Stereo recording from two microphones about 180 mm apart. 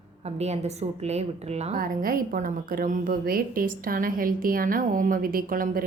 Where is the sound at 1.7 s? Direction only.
50° right (ahead or behind).